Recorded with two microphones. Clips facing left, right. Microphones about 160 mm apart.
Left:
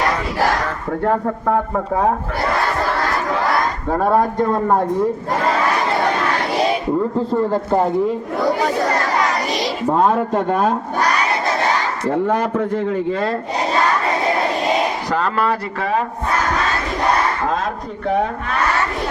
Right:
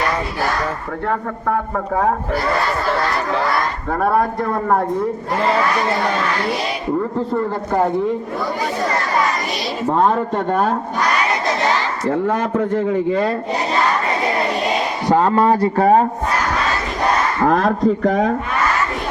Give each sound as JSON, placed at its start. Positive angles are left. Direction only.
{"t": 3.9, "sound": "a man's voice", "side_deg": 25}
{"t": 9.9, "sound": "speech", "side_deg": 5}
{"t": 13.1, "sound": "speech", "side_deg": -10}
{"t": 15.1, "sound": "speech", "side_deg": -20}
{"t": 15.8, "sound": "speech", "side_deg": -40}
{"t": 17.4, "sound": "a man's voice", "side_deg": -65}